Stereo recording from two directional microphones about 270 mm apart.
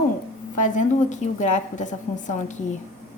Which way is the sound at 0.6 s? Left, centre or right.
Left.